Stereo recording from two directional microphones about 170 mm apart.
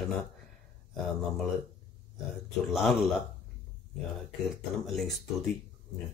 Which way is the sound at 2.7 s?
Centre (ahead or behind).